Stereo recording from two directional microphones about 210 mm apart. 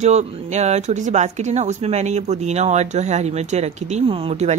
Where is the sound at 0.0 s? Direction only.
30° right (ahead or behind).